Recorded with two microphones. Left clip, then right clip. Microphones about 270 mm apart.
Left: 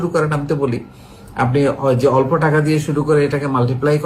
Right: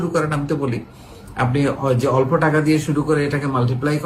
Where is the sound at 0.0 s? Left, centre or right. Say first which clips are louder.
Left 3 dB; centre.